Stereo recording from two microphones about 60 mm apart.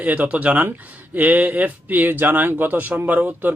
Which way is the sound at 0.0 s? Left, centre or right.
Right.